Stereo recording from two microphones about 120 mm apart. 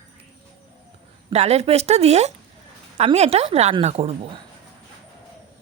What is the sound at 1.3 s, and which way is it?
Speech, 65° right (ahead or behind).